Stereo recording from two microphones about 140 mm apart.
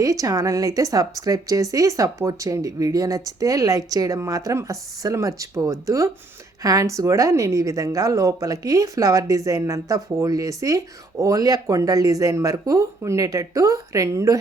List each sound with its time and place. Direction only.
0.0 s speech: 25° right (ahead or behind)